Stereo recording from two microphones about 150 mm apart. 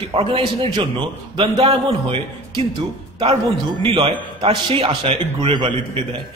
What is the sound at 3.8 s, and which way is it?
Speech, 35° right (ahead or behind).